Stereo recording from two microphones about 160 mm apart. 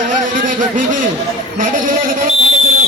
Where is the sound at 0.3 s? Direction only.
55° right (ahead or behind).